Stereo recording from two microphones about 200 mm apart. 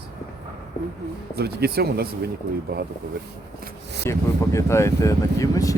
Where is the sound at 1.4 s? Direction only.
55° right (ahead or behind).